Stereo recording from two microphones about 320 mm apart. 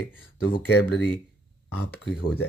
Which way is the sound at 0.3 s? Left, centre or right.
Left.